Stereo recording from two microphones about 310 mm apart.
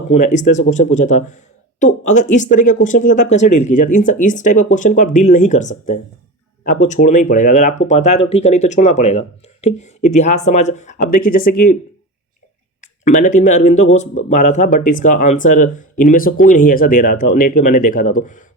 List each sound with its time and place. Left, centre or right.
0.1 s speech: left
12.8 s speech: left